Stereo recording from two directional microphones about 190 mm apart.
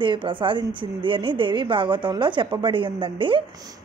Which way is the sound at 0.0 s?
25° right (ahead or behind).